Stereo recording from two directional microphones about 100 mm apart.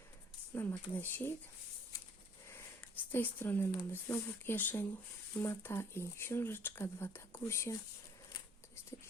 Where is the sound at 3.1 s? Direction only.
20° left (ahead or behind).